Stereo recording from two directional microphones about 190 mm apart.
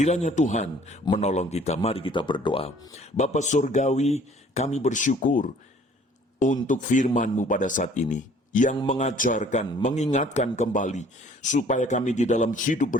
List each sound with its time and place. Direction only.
0.0 s speech: 35° left (ahead or behind)